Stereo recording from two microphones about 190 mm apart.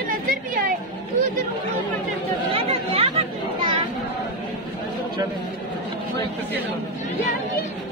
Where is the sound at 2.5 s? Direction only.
30° right (ahead or behind).